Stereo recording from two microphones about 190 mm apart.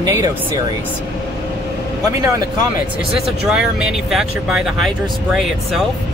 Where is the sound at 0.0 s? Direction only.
15° right (ahead or behind).